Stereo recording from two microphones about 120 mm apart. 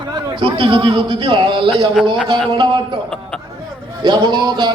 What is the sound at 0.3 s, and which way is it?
A man's voice, 45° right (ahead or behind).